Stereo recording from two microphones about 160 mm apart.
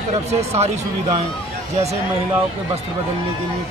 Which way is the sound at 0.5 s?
40° right (ahead or behind).